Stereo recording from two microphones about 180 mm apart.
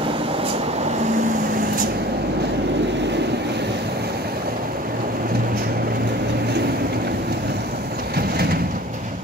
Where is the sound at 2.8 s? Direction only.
75° right (ahead or behind).